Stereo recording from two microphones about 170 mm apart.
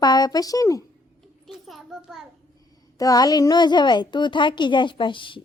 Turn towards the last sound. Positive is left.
turn(degrees=30)  # may be behind; listen again after turning